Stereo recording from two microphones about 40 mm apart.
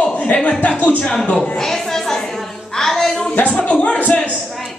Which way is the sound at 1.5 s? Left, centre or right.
Centre.